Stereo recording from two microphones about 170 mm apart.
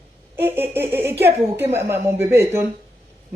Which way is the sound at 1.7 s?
15° right (ahead or behind).